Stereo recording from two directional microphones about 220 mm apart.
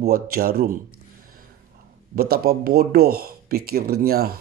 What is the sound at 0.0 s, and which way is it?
Speech, 45° right (ahead or behind).